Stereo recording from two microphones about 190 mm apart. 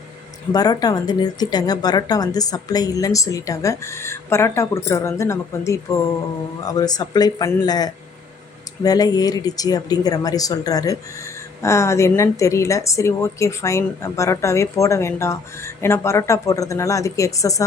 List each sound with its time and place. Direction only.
0.5 s a woman's voice: 20° left (ahead or behind)